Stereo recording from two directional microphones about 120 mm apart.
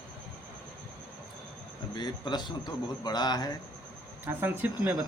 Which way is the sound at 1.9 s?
35° left (ahead or behind).